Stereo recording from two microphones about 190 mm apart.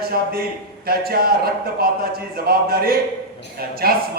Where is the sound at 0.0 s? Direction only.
55° right (ahead or behind).